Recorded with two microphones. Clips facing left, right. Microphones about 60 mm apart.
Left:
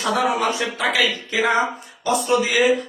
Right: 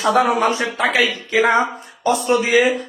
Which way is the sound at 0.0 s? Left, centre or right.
Right.